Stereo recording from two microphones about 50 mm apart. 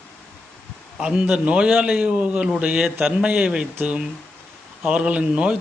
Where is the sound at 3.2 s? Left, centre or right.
Right.